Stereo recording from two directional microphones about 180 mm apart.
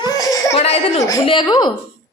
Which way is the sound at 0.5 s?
35° left (ahead or behind).